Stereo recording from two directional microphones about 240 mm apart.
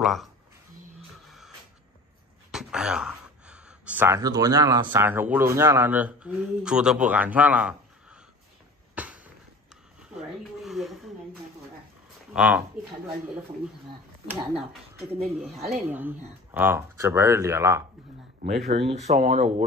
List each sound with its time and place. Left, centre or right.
0.0 s speech: centre
1.2 s music: centre
2.5 s speech: centre
8.9 s a sound: centre
10.6 s speech: centre
12.3 s speech: centre
14.2 s speech: centre
18.7 s speech: right